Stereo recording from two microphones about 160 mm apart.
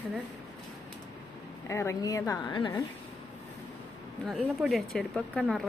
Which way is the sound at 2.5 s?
30° left (ahead or behind).